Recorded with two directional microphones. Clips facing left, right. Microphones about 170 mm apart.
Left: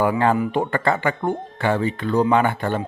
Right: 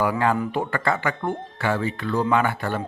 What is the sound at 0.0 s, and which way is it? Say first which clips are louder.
Speech: left 3 dB; 25° left (ahead or behind).